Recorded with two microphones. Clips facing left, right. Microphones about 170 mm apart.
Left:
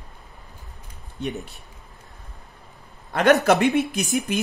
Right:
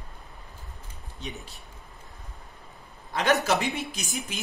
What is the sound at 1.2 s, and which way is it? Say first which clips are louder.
Speech: left 10 dB; 60° left (ahead or behind).